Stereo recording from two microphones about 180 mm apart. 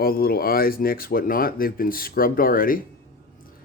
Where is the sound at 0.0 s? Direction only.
55° left (ahead or behind).